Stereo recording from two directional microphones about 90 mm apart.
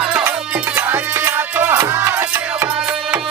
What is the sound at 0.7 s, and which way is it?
Music, 25° right (ahead or behind).